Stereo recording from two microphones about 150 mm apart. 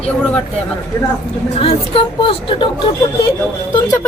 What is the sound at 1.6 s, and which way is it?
Speech, 35° left (ahead or behind).